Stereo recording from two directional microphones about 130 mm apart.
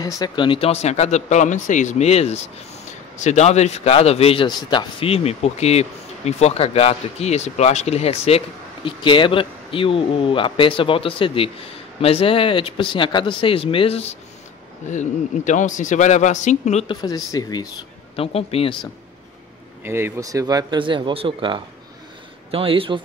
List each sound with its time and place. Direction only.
0.0 s speech: 30° left (ahead or behind); by 4.5 s 50° left (ahead or behind)
4.5 s speech: 35° left (ahead or behind); by 8.4 s 55° left (ahead or behind)
8.8 s speech: 40° left (ahead or behind)
14.9 s speech: 70° left (ahead or behind)
16.8 s speech: 35° left (ahead or behind)
18.1 s speech: 50° left (ahead or behind)
19.8 s speech: 20° right (ahead or behind); by 22.9 s 45° right (ahead or behind)